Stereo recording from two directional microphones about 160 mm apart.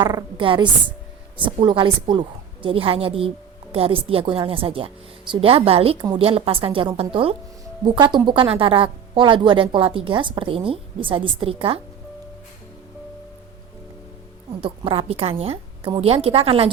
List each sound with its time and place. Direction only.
0.0 s a woman's voice: 25° right (ahead or behind)
14.6 s speech: 35° right (ahead or behind)